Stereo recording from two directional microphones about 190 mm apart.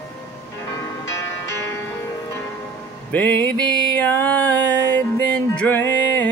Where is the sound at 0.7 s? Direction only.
15° left (ahead or behind).